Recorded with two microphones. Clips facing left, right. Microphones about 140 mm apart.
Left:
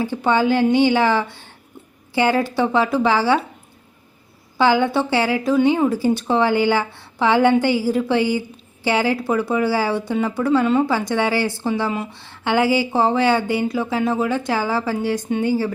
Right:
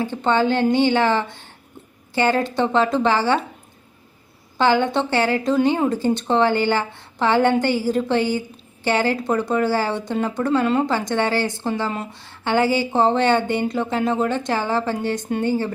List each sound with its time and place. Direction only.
0.0 s a woman's voice: 10° left (ahead or behind)
4.5 s a woman's voice: 10° left (ahead or behind)
11.4 s speech: 20° right (ahead or behind)
11.8 s speech: 5° left (ahead or behind)
12.1 s speech: 15° right (ahead or behind)
12.5 s a woman's voice: 10° left (ahead or behind)